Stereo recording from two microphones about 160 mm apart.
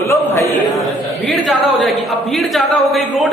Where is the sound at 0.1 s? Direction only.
15° left (ahead or behind).